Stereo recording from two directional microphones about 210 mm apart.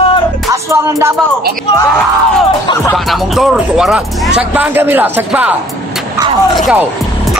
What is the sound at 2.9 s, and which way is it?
Speech, centre (ahead or behind).